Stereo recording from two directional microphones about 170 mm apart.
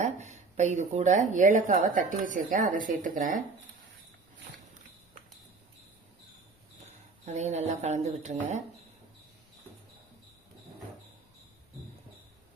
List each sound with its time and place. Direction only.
0.0 s a woman's voice: 45° right (ahead or behind)
6.8 s speech: 40° right (ahead or behind)